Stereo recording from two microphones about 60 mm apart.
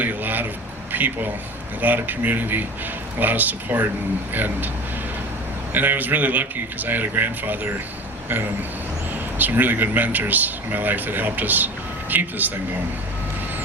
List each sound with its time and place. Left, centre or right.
0.0 s a sound: right
0.9 s a man's voice: right
5.7 s a man's voice: right
9.4 s speech: right